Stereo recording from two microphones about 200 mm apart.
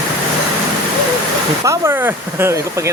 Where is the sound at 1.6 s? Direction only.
15° right (ahead or behind).